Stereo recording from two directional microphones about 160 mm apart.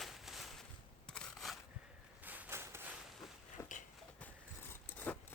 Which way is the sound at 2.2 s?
10° right (ahead or behind).